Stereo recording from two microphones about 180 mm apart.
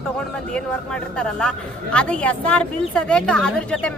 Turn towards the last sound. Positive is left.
turn(degrees=5)  # may be behind; listen again after turning